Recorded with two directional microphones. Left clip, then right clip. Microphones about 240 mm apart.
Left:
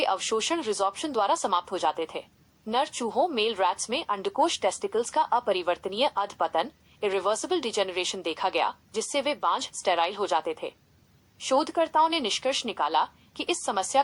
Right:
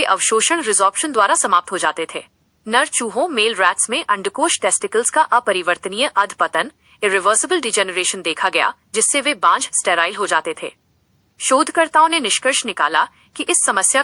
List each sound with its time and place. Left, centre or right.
0.0 s speech: centre